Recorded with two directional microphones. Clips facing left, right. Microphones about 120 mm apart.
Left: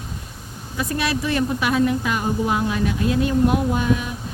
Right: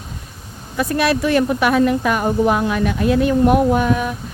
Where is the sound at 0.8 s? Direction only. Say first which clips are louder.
Right 6 dB; 60° right (ahead or behind).